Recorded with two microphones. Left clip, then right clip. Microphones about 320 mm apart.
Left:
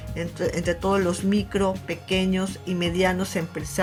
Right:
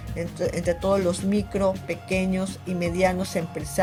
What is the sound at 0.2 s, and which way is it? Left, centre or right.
Speech, centre.